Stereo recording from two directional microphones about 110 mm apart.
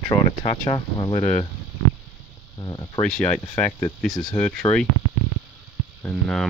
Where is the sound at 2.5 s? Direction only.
35° left (ahead or behind).